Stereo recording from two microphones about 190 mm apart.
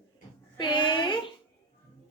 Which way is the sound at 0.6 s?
25° left (ahead or behind).